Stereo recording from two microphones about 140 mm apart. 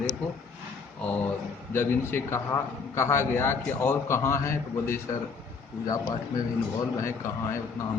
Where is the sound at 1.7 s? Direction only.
15° left (ahead or behind).